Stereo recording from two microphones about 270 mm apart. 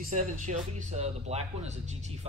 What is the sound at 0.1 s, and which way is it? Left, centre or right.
Speech, right.